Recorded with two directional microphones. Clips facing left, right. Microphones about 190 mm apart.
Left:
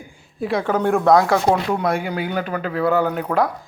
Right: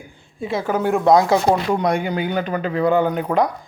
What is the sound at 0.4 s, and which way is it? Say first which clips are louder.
Speech: left 1 dB; 5° right (ahead or behind).